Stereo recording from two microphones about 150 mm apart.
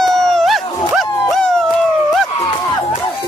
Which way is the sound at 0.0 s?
5° left (ahead or behind).